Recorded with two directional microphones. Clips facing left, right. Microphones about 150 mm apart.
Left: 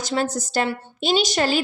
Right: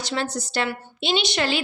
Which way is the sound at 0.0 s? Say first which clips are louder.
Left 3 dB; 45° left (ahead or behind).